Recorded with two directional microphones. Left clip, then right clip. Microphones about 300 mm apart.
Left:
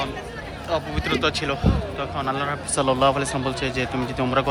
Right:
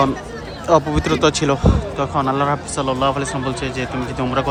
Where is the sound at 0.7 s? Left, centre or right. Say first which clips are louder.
Right 9 dB; centre.